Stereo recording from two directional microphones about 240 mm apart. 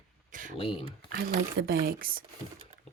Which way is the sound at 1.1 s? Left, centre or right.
Right.